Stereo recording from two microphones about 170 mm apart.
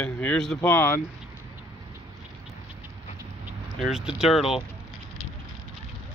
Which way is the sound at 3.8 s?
5° right (ahead or behind).